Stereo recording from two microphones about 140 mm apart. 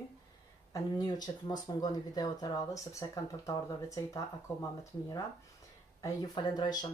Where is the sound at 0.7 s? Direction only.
30° left (ahead or behind).